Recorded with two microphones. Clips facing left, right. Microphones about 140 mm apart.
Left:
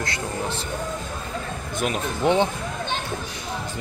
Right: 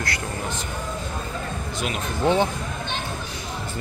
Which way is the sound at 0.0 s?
25° left (ahead or behind).